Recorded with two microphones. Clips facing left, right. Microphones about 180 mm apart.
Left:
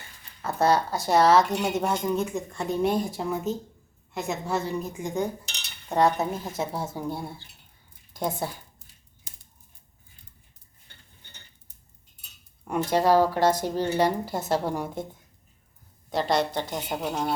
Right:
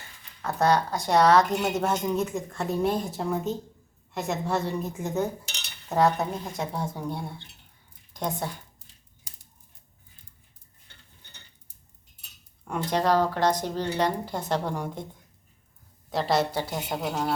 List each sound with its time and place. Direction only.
0.4 s speech: 5° left (ahead or behind)
9.3 s scissors: 35° right (ahead or behind)
12.6 s speech: 10° left (ahead or behind)
16.0 s speech: centre (ahead or behind)